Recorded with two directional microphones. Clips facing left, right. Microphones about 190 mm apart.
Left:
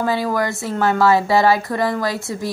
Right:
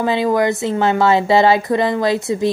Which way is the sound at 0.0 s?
20° right (ahead or behind).